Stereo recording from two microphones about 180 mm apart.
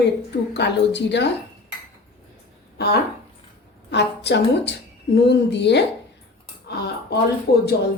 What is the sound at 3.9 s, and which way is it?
A woman's voice, 75° left (ahead or behind).